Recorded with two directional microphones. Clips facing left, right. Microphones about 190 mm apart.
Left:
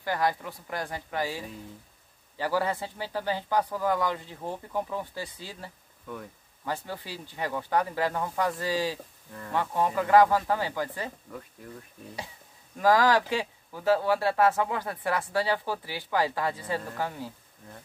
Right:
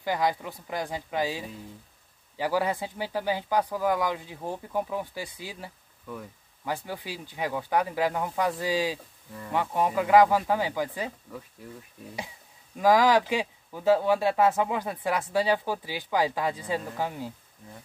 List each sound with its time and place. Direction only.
0.0 s speech: 15° right (ahead or behind)
12.7 s speech: 15° right (ahead or behind)